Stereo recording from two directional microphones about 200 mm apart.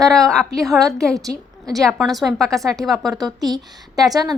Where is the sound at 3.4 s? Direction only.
20° right (ahead or behind).